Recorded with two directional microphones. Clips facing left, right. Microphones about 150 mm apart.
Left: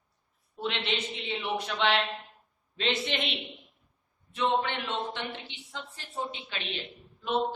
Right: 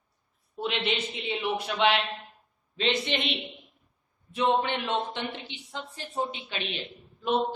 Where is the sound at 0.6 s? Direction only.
10° right (ahead or behind).